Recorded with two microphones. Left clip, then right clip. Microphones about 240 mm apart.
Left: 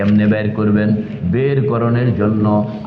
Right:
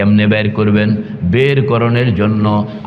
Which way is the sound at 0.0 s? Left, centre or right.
Right.